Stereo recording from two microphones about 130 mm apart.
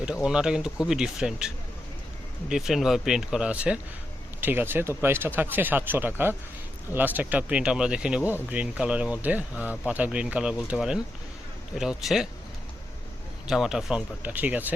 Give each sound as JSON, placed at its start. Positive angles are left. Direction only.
{"t": 0.0, "sound": "speech", "side_deg": 0}
{"t": 2.5, "sound": "speech", "side_deg": 0}
{"t": 13.5, "sound": "speech", "side_deg": -5}